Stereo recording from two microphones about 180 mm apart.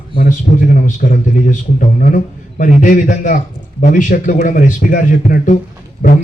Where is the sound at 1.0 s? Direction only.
45° left (ahead or behind).